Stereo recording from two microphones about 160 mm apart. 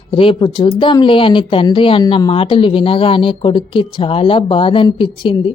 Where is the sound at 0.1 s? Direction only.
30° left (ahead or behind).